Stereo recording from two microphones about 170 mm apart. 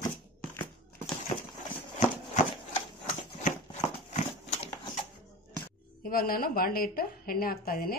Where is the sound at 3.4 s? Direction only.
40° left (ahead or behind).